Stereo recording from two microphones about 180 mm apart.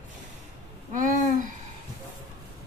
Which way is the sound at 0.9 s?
45° right (ahead or behind).